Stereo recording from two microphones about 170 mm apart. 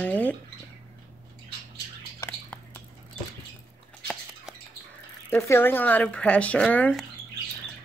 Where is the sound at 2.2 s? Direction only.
10° left (ahead or behind).